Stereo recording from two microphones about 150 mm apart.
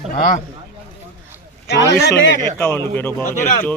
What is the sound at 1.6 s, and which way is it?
Speech, 90° left.